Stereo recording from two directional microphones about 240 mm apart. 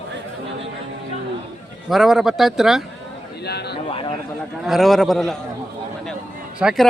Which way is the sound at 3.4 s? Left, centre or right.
Left.